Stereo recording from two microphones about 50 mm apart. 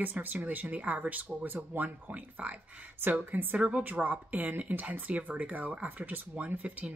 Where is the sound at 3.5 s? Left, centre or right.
Right.